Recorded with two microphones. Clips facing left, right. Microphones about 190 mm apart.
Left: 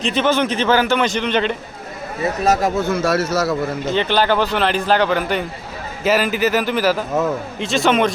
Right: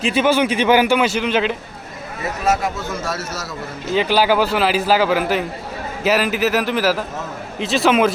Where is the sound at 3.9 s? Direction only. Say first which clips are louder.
Right 2 dB; 5° right (ahead or behind).